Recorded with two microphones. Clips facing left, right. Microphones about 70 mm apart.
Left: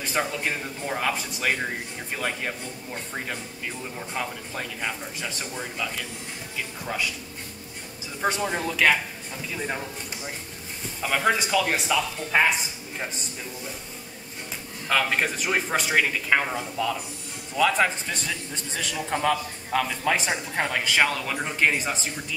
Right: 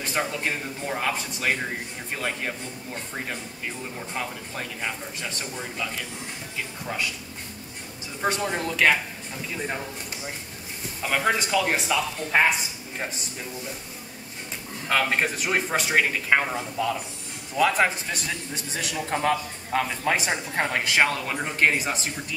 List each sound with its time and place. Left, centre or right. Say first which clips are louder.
0.1 s a man's voice: left 1 dB; centre
8.2 s a man's voice: even; centre
11.0 s a man's voice: left 1 dB; centre
14.9 s a man's voice: even; centre
21.4 s a man's voice: right 1 dB; centre